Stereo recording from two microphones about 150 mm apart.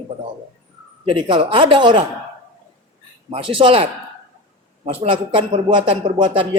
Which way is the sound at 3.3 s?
35° right (ahead or behind).